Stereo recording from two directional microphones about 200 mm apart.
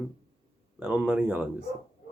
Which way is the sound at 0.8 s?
5° right (ahead or behind).